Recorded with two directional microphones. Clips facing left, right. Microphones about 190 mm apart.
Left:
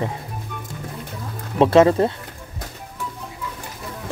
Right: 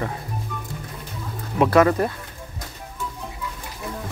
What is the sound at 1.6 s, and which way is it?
Speech, 25° left (ahead or behind).